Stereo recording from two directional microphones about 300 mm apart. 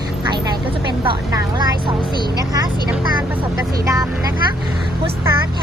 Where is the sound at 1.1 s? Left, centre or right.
Centre.